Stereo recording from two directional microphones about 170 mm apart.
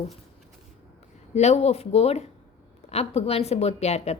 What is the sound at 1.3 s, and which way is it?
Speech, 40° left (ahead or behind).